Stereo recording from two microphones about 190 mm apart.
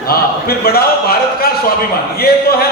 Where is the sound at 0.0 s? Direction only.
50° left (ahead or behind).